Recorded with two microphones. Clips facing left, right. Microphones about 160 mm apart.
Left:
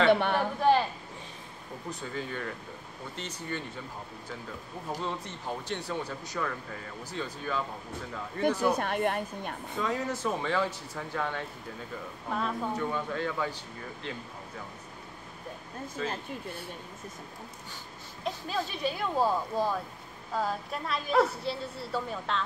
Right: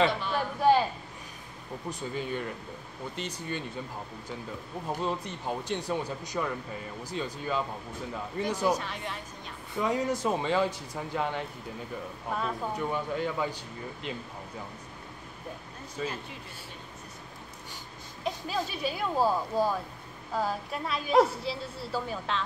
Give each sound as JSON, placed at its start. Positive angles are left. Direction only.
{"t": 0.0, "sound": "a woman's voice", "side_deg": 65}
{"t": 0.6, "sound": "a sound", "side_deg": -5}
{"t": 1.9, "sound": "speech", "side_deg": -20}
{"t": 5.0, "sound": "speech", "side_deg": -15}
{"t": 8.7, "sound": "a woman's voice", "side_deg": 55}
{"t": 9.8, "sound": "speech", "side_deg": -15}
{"t": 12.3, "sound": "speech", "side_deg": -5}
{"t": 12.7, "sound": "speech", "side_deg": -15}
{"t": 18.2, "sound": "speech", "side_deg": -5}